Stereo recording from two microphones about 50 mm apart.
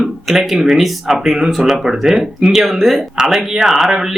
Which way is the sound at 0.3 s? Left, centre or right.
Centre.